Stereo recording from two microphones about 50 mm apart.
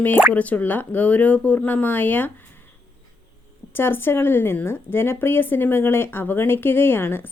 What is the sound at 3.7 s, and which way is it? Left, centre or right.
Speech, left.